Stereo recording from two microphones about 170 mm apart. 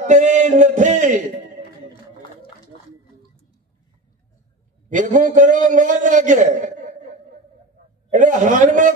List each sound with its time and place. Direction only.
0.0 s a sound: 45° right (ahead or behind)
4.8 s a man's voice: 50° right (ahead or behind)
8.1 s a man's voice: 50° right (ahead or behind)